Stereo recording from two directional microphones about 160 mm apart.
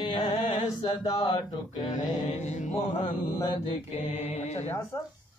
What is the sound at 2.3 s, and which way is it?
Chant, 45° left (ahead or behind).